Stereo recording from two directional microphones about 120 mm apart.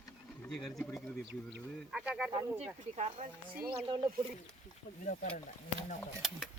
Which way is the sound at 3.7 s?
40° right (ahead or behind).